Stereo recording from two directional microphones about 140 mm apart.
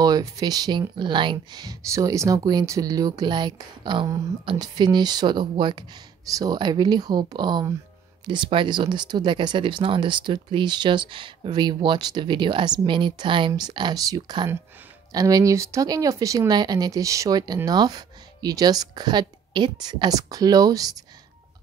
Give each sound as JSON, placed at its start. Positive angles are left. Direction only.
{"t": 0.0, "sound": "speech", "side_deg": -30}